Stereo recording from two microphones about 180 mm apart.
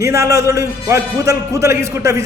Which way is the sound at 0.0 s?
15° right (ahead or behind).